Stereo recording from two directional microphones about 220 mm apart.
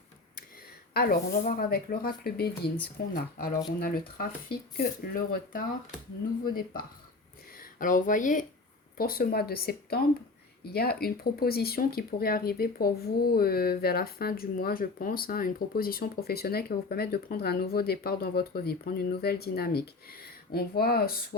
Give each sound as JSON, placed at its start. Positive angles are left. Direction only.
{"t": 0.9, "sound": "speech", "side_deg": 40}